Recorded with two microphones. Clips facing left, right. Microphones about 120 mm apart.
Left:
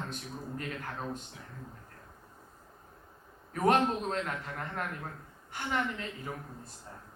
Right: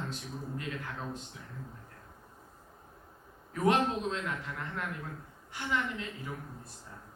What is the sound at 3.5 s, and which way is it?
Speech, 50° left (ahead or behind).